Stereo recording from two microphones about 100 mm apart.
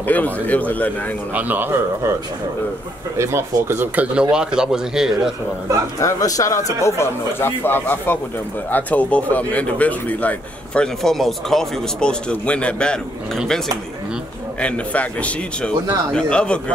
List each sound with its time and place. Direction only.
0.0 s speech: 15° left (ahead or behind)
1.3 s speech: 20° right (ahead or behind)
3.2 s speech: 25° right (ahead or behind); by 5.3 s 5° right (ahead or behind)
5.9 s speech: 35° left (ahead or behind); by 13.4 s 10° left (ahead or behind)
14.6 s speech: 15° left (ahead or behind)